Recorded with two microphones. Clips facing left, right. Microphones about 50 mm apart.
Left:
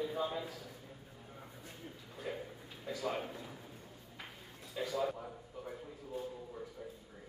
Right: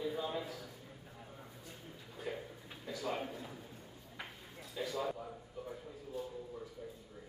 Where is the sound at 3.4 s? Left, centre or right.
Centre.